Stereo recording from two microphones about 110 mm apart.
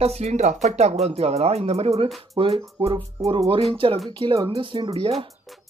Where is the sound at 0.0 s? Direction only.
80° right.